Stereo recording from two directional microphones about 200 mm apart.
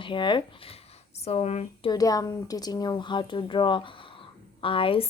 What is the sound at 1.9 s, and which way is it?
Speech, 20° left (ahead or behind).